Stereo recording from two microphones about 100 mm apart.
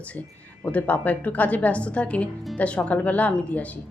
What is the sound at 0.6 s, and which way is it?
A woman's voice, 15° left (ahead or behind).